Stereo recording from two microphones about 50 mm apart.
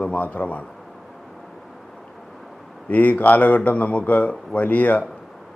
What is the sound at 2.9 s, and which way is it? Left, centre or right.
A man's voice, left.